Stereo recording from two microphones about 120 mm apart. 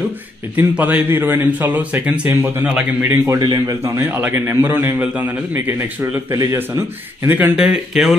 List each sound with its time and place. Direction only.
0.6 s a man's voice: 15° right (ahead or behind)
3.3 s a man's voice: 35° right (ahead or behind); by 7.5 s 15° right (ahead or behind)
7.5 s speech: 5° right (ahead or behind)